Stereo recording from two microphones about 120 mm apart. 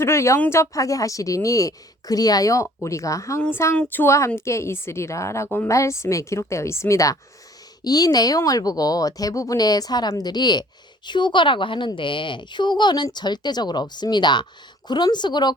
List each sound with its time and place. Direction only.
0.0 s a woman's voice: 20° left (ahead or behind)